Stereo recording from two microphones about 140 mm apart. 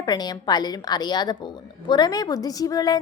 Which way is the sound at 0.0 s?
30° left (ahead or behind).